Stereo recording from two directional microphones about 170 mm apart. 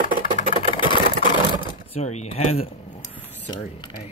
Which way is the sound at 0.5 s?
30° left (ahead or behind).